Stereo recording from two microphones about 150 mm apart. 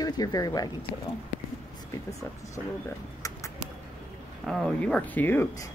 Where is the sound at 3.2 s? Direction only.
25° left (ahead or behind).